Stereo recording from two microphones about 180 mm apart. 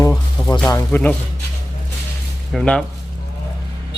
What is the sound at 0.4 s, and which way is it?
Music, 10° left (ahead or behind).